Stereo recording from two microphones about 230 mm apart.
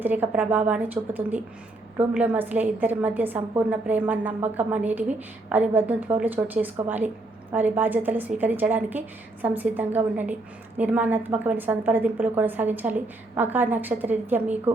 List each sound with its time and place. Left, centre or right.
0.0 s a woman's voice: centre